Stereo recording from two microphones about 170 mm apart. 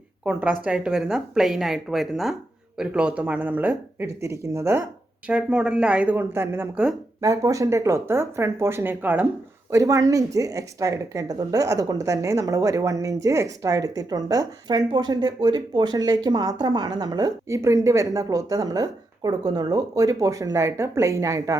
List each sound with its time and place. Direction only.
0.3 s a woman's voice: 10° right (ahead or behind)